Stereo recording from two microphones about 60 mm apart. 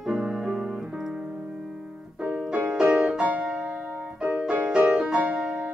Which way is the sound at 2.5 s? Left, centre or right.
Centre.